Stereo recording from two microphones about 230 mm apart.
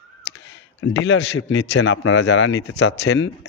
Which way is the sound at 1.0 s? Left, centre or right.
Left.